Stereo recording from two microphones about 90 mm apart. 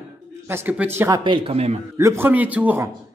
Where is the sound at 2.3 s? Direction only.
15° right (ahead or behind).